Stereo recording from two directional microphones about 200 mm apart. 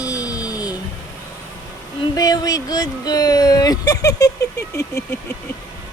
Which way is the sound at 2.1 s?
20° left (ahead or behind).